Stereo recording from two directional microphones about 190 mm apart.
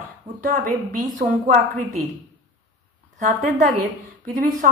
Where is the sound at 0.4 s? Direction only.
45° right (ahead or behind).